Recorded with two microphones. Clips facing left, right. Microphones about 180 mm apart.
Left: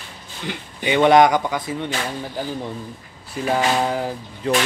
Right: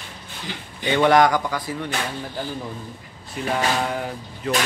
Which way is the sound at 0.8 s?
15° left (ahead or behind).